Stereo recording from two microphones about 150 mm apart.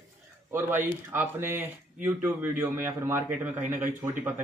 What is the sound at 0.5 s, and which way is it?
Speech, 15° right (ahead or behind).